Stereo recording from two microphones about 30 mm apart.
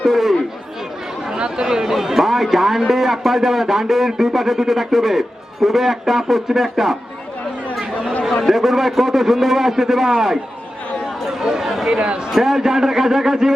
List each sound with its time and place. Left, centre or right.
0.0 s chatter: centre
1.3 s a man's voice: right
8.4 s a man's voice: centre
11.2 s chatter: centre
11.4 s speech: right
11.9 s a man's voice: right
12.3 s a man's voice: centre